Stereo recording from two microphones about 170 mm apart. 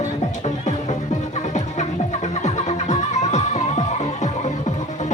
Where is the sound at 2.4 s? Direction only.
45° left (ahead or behind).